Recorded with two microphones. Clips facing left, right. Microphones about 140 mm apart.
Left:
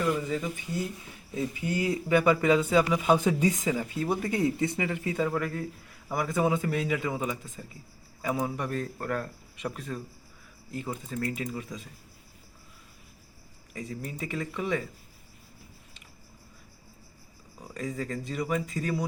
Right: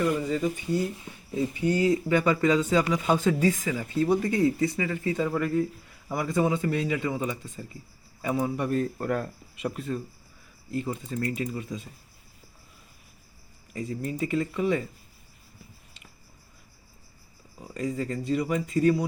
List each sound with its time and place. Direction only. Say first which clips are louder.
1.4 s speech: right 5 dB; 10° left (ahead or behind)
4.5 s speech: right 2 dB; 20° left (ahead or behind); by 11.9 s centre (ahead or behind)
13.7 s speech: right 6 dB; centre (ahead or behind)
17.7 s speech: right 4 dB; centre (ahead or behind)